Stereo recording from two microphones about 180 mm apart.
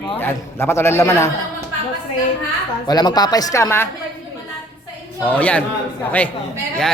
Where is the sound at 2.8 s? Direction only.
20° left (ahead or behind).